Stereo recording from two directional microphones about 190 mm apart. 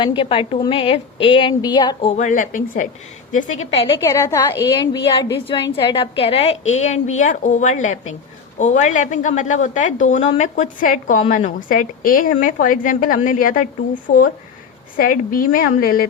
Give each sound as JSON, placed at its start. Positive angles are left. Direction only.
{"t": 0.0, "sound": "a woman's voice", "side_deg": 25}
{"t": 2.1, "sound": "a woman's voice", "side_deg": 40}